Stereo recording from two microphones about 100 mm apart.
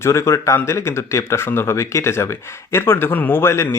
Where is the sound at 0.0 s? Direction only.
30° left (ahead or behind).